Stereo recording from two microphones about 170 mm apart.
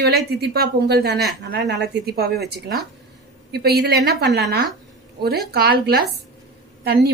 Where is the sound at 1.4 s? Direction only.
85° right; by 2.5 s 70° right (ahead or behind).